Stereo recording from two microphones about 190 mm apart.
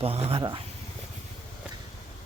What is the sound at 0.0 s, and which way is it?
Speech, 30° right (ahead or behind).